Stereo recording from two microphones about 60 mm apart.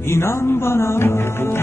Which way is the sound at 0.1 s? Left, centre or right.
Left.